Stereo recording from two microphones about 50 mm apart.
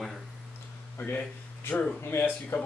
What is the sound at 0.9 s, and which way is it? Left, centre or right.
Speech, left.